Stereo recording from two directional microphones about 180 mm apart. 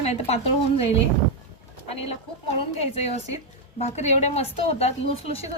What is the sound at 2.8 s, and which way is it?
A woman's voice, 35° left (ahead or behind).